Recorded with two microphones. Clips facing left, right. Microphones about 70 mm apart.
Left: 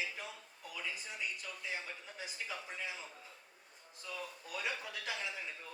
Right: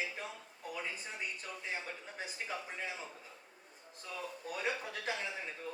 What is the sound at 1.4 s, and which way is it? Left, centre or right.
Speech, right.